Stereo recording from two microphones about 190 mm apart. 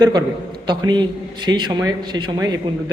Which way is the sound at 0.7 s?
25° right (ahead or behind).